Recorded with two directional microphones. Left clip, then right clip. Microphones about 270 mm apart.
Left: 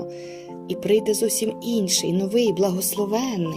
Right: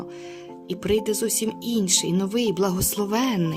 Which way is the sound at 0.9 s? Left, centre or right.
Centre.